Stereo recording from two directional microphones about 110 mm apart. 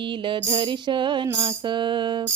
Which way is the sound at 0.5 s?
45° right (ahead or behind).